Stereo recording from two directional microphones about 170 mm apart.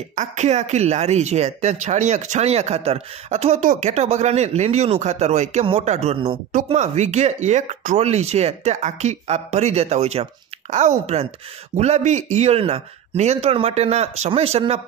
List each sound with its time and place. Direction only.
0.1 s speech: 45° right (ahead or behind)